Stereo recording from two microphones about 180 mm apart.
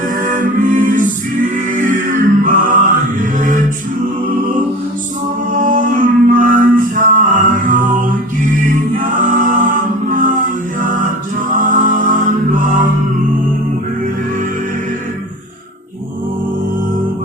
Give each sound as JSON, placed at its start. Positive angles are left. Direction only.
{"t": 0.2, "sound": "music", "side_deg": -45}
{"t": 1.7, "sound": "a sound", "side_deg": -50}
{"t": 3.2, "sound": "mantra", "side_deg": -50}
{"t": 5.5, "sound": "music", "side_deg": -45}
{"t": 11.5, "sound": "music", "side_deg": -45}